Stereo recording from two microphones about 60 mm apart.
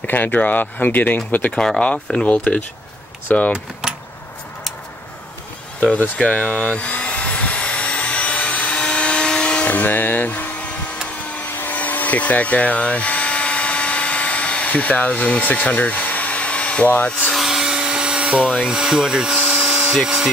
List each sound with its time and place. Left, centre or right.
0.0 s speech: left
1.5 s speech: centre; by 3.5 s left
6.1 s vehicle: centre
11.6 s a sound: left
16.9 s speech: left
17.3 s vacuum cleaner: centre
18.6 s speech: centre